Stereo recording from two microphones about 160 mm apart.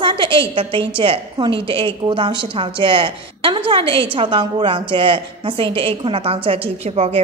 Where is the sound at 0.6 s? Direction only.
35° right (ahead or behind).